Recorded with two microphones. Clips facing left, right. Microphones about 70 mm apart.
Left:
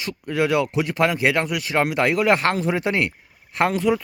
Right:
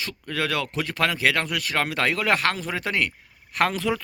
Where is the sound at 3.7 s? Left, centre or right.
Centre.